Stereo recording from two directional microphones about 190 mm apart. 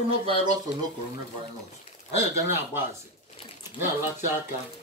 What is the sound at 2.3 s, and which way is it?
Speech, 15° right (ahead or behind).